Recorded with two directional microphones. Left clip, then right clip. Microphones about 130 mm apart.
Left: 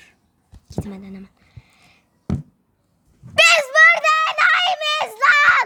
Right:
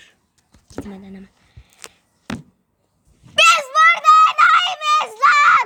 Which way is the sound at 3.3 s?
25° left (ahead or behind).